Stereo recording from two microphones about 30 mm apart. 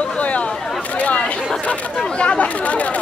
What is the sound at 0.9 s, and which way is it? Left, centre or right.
Chatter, left.